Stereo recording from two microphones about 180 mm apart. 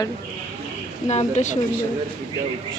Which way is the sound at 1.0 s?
40° left (ahead or behind).